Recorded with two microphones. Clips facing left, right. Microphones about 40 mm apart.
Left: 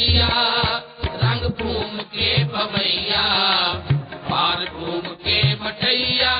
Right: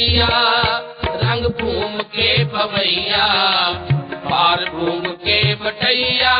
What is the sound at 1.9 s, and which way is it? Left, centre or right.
Music, right.